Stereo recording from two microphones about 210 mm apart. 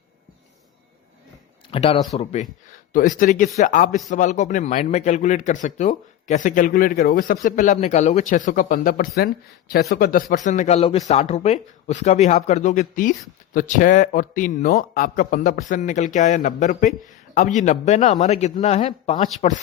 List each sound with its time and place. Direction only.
1.7 s speech: 25° left (ahead or behind)